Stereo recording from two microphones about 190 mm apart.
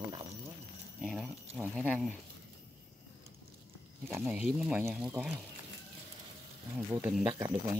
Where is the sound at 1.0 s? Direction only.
Centre (ahead or behind).